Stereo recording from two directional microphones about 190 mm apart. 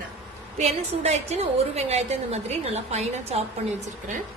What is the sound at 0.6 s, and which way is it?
A woman's voice, 35° right (ahead or behind).